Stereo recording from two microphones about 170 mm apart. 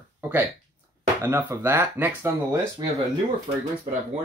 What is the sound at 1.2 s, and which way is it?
Speech, 15° right (ahead or behind).